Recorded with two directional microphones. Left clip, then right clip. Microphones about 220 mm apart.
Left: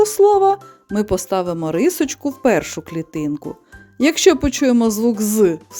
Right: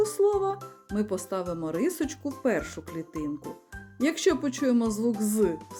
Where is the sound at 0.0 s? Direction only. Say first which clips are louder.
Left 12 dB; 40° left (ahead or behind).